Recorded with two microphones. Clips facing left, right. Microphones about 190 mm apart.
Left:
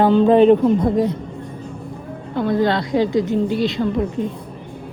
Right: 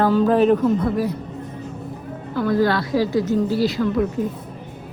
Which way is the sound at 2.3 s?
25° left (ahead or behind).